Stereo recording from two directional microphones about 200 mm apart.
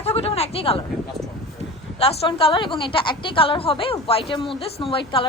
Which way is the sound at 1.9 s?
30° left (ahead or behind).